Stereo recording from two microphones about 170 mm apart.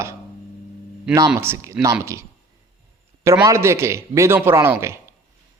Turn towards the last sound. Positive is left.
turn(degrees=-15)  # may be behind; listen again after turning